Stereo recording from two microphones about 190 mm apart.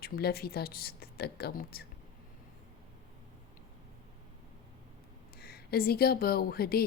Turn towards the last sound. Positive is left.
turn(degrees=55)  # may be behind; listen again after turning